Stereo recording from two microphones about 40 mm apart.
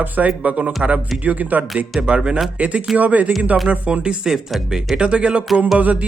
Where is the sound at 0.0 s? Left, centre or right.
Right.